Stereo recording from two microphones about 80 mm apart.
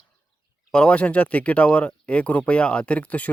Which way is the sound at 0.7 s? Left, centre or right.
Centre.